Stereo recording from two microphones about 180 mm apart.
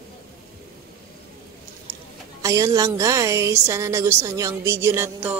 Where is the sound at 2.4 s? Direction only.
15° right (ahead or behind).